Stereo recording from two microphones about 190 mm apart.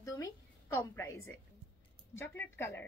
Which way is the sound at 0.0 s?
15° left (ahead or behind).